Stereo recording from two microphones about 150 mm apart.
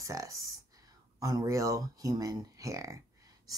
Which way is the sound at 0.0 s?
20° right (ahead or behind).